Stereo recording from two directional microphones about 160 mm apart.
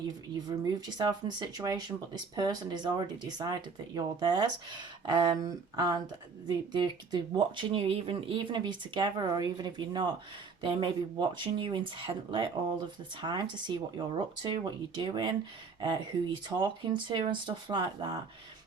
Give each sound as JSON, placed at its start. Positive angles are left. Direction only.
{"t": 0.4, "sound": "speech", "side_deg": -25}
{"t": 16.5, "sound": "speech", "side_deg": -30}